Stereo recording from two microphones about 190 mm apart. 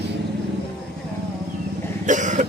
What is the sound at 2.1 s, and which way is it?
Vehicle, 40° right (ahead or behind).